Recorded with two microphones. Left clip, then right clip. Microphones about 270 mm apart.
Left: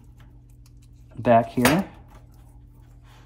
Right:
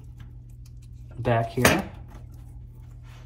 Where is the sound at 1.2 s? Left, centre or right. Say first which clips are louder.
Left 7 dB; left.